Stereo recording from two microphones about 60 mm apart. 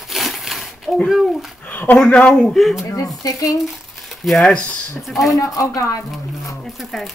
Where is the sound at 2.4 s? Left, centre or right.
Centre.